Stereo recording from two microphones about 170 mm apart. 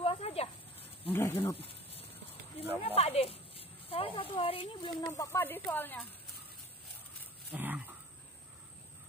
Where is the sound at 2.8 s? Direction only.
35° left (ahead or behind).